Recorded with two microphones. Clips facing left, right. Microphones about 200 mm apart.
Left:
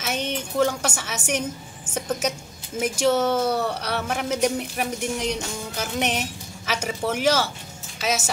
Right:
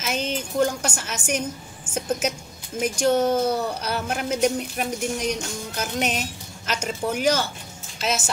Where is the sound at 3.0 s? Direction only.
90° left.